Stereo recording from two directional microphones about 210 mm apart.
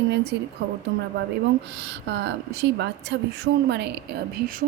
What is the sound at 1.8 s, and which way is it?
Speech, 55° right (ahead or behind).